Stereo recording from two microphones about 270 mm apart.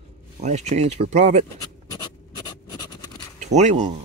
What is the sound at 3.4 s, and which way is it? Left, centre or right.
Speech, right.